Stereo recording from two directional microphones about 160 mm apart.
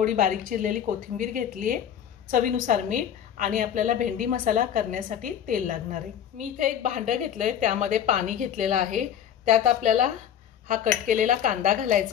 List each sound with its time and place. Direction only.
0.0 s a woman's voice: 55° right (ahead or behind)